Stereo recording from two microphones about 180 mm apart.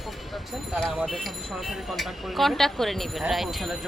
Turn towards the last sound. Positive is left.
turn(degrees=0)  # may be behind; listen again after turning